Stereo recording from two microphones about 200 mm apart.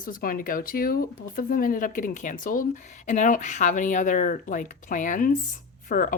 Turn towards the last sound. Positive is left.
turn(degrees=45)  # may be behind; listen again after turning